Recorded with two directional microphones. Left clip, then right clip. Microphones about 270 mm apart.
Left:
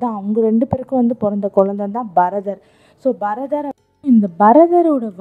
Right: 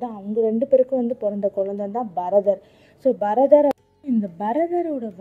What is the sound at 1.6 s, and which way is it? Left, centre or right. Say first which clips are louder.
Speech: left 8 dB; left.